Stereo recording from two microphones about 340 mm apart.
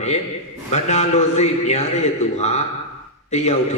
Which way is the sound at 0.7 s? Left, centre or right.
Centre.